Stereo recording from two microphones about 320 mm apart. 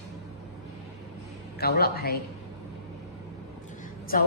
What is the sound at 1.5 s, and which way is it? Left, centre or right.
Speech, left.